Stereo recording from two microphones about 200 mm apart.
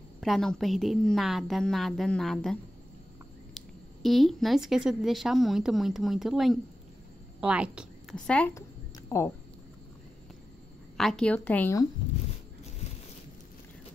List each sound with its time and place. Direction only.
0.2 s a woman's voice: centre (ahead or behind)
11.0 s a woman's voice: 5° left (ahead or behind)